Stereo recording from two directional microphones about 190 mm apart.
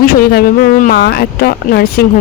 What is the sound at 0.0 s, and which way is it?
Speech, 50° left (ahead or behind).